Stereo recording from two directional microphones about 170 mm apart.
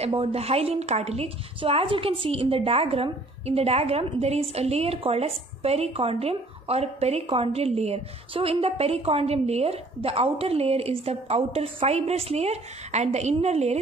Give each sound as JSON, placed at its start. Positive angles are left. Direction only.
{"t": 0.0, "sound": "a woman's voice", "side_deg": -35}